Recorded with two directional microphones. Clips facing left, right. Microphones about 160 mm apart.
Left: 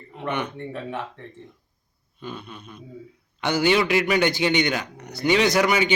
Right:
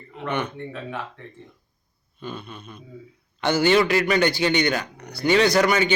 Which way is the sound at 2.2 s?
15° left (ahead or behind).